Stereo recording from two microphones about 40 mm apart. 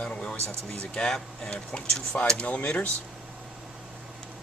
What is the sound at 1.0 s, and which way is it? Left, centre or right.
Speech, centre.